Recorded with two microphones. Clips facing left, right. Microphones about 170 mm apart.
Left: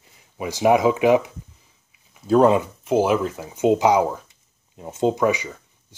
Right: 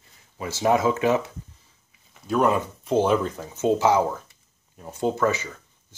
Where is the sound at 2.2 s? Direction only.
30° left (ahead or behind).